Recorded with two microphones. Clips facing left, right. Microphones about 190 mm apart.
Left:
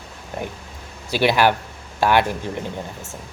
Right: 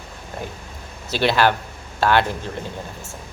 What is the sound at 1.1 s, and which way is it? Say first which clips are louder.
Speech: left 1 dB; 15° left (ahead or behind).